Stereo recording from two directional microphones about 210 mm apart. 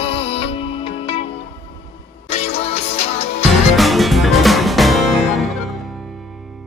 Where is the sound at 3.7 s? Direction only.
Centre (ahead or behind).